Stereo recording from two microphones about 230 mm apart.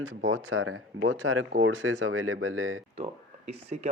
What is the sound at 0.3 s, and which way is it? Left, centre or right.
Speech, right.